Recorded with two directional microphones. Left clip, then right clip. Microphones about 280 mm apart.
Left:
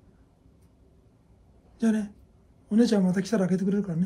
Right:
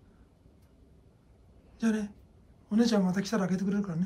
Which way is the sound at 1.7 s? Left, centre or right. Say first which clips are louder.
Left 4 dB; centre.